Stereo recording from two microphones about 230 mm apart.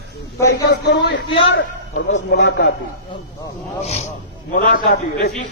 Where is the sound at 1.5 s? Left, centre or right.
Left.